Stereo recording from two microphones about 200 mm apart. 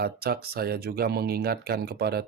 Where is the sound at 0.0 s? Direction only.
50° right (ahead or behind).